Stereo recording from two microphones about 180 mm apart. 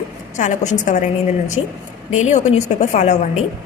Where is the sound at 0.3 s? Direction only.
40° left (ahead or behind).